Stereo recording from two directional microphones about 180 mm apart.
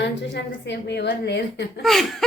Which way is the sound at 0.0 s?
75° left (ahead or behind).